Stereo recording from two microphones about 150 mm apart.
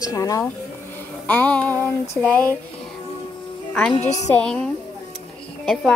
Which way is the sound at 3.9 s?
50° left (ahead or behind).